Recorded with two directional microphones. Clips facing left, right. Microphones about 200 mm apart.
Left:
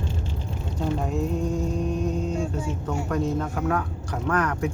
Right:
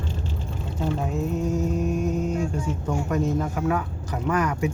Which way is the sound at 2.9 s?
10° right (ahead or behind).